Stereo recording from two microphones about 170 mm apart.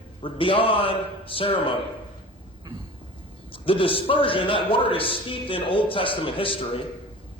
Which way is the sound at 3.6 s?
30° left (ahead or behind).